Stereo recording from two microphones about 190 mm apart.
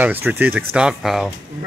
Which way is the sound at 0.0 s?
10° right (ahead or behind).